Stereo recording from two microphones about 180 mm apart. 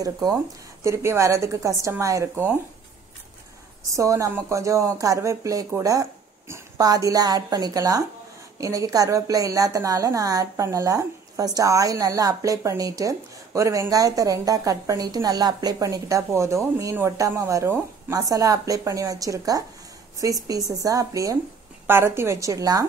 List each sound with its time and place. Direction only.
0.0 s a woman's voice: 20° right (ahead or behind)
3.9 s a woman's voice: 15° right (ahead or behind)